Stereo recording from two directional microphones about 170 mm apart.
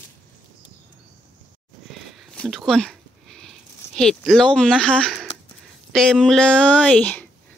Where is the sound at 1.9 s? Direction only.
Centre (ahead or behind).